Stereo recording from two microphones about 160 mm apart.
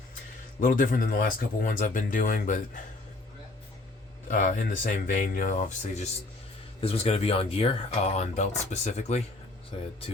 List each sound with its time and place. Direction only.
0.6 s speech: 60° left (ahead or behind)
4.3 s speech: 50° left (ahead or behind)